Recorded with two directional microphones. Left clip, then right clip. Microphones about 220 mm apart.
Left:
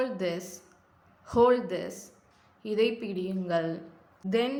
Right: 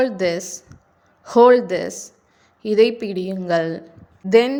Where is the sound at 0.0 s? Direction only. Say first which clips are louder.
Right 11 dB; 35° right (ahead or behind).